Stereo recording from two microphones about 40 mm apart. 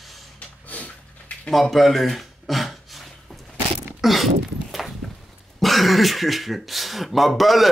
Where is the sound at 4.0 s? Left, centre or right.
Centre.